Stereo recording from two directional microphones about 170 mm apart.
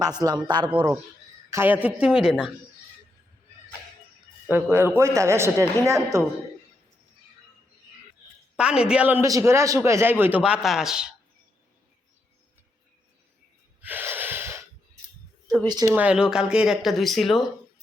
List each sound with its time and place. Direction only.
0.0 s a man's voice: 25° right (ahead or behind)
1.5 s speech: 15° right (ahead or behind)
4.4 s a man's voice: 10° right (ahead or behind)
8.5 s a man's voice: 5° right (ahead or behind)
13.8 s snort: 10° right (ahead or behind)
15.6 s a man's voice: 25° right (ahead or behind)
16.0 s speech: 5° right (ahead or behind)